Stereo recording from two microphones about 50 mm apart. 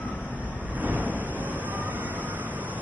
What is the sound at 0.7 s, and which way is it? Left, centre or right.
Vehicle, right.